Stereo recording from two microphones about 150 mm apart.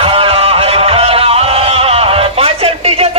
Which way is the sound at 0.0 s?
40° right (ahead or behind).